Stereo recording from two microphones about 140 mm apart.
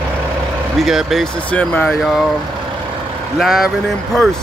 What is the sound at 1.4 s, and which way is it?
Speech, 10° left (ahead or behind).